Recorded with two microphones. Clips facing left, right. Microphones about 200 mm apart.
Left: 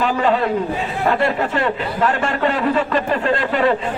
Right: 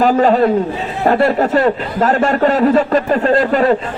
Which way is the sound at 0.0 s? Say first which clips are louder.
Right 6 dB; 40° right (ahead or behind).